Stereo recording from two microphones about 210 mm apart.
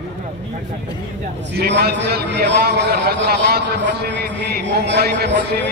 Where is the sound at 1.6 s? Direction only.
50° right (ahead or behind).